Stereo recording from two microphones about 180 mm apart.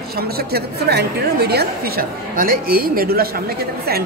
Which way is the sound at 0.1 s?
60° right (ahead or behind).